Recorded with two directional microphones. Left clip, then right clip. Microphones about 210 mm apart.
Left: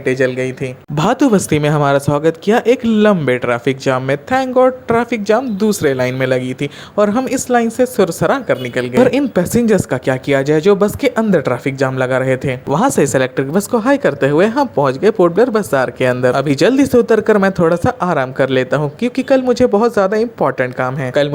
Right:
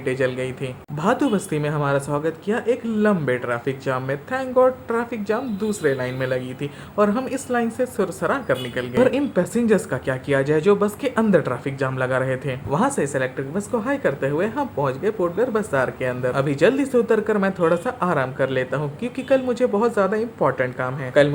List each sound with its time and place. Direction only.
0.0 s speech: 25° left (ahead or behind)
0.9 s speech: 35° left (ahead or behind)